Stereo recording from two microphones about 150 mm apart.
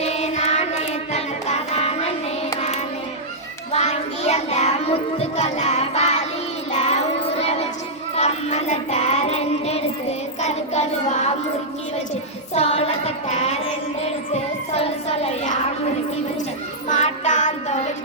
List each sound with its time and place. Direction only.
0.0 s a sound: 45° left (ahead or behind)
1.1 s music: 45° left (ahead or behind)
3.7 s child singing: 50° left (ahead or behind)
6.7 s music: 50° left (ahead or behind)
8.1 s child singing: 45° left (ahead or behind)
12.5 s a sound: 45° left (ahead or behind)
14.3 s child singing: 45° left (ahead or behind)
16.9 s music: 55° left (ahead or behind)